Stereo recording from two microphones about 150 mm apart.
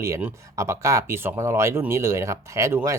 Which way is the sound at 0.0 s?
15° right (ahead or behind).